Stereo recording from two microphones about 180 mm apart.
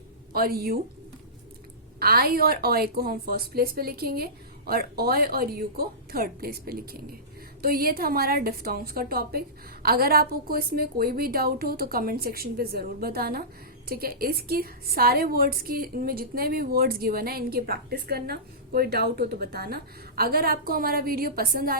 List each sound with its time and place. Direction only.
0.3 s a woman's voice: 55° right (ahead or behind)
2.0 s a woman's voice: 55° right (ahead or behind)